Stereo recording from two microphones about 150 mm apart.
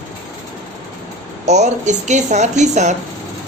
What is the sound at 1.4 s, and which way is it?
Speech, 50° right (ahead or behind).